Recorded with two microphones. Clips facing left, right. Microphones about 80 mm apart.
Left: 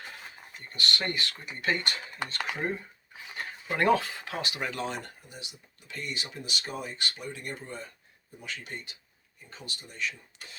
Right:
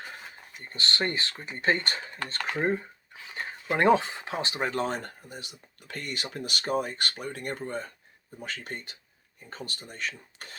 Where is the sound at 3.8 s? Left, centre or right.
Right.